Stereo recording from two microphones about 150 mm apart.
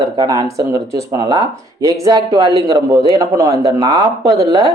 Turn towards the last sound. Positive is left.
turn(degrees=-25)  # may be behind; listen again after turning